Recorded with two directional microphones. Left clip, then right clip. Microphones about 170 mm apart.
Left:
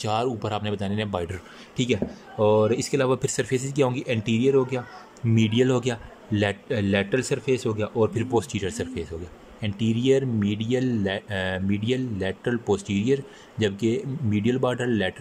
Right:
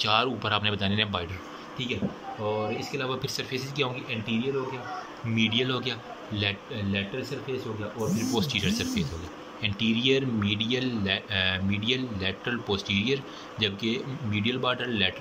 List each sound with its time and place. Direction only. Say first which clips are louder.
0.0 s speech: right 1 dB; 35° left (ahead or behind)
2.4 s speech: left 10 dB; 60° left (ahead or behind)
8.3 s speech: left 2 dB; 45° left (ahead or behind)